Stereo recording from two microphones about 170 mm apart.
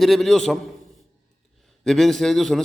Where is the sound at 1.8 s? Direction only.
Centre (ahead or behind).